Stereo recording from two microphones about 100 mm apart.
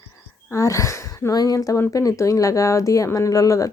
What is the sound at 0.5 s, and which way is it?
Speech, 30° left (ahead or behind).